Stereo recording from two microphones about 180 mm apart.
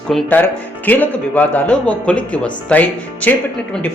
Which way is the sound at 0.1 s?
5° left (ahead or behind).